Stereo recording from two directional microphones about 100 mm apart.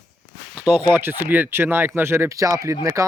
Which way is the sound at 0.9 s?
20° right (ahead or behind).